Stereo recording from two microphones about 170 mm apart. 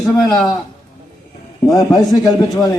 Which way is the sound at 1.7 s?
20° left (ahead or behind).